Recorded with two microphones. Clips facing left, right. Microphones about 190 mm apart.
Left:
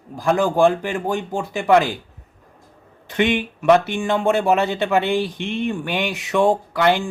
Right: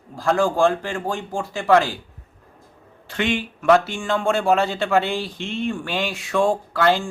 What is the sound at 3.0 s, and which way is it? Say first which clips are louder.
Speech: left 4 dB; 20° left (ahead or behind).